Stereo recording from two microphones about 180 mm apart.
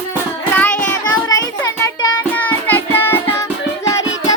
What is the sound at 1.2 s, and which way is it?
Music, 20° left (ahead or behind).